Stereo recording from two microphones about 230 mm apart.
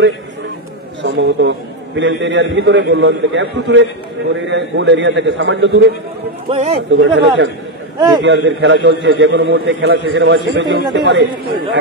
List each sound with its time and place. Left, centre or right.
1.0 s a man's voice: right
6.5 s a man's voice: right
6.9 s a man's voice: right